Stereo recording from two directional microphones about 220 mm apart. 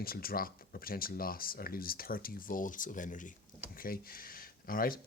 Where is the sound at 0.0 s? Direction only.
40° left (ahead or behind).